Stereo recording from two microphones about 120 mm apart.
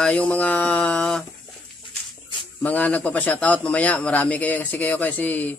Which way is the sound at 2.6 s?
15° left (ahead or behind).